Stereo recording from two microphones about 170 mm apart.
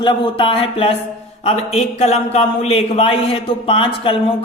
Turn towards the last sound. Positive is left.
turn(degrees=30)  # may be behind; listen again after turning